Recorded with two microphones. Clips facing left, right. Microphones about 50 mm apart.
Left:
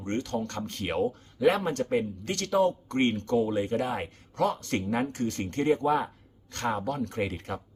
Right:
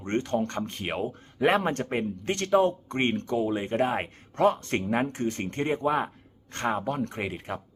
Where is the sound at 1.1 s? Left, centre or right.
Right; by 3.6 s centre.